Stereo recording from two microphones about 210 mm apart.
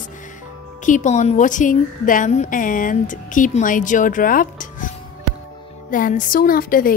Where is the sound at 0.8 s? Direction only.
35° left (ahead or behind).